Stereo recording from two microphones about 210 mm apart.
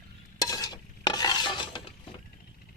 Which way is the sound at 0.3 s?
15° left (ahead or behind).